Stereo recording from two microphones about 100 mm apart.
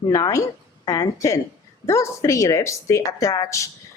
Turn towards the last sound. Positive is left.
turn(degrees=30)  # may be behind; listen again after turning